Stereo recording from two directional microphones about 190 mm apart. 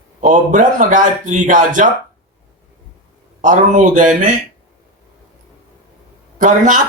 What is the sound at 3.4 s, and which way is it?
Speech, 40° right (ahead or behind).